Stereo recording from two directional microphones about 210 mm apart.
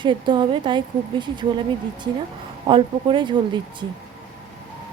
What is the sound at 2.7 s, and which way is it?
A woman's voice, 25° right (ahead or behind).